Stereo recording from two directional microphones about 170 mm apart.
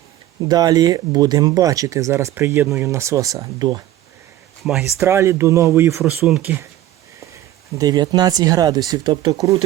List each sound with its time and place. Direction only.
0.4 s speech: 25° right (ahead or behind)
4.6 s speech: 5° right (ahead or behind)
4.9 s speech: 15° right (ahead or behind)
6.2 s speech: 5° right (ahead or behind)
7.8 s speech: 25° right (ahead or behind)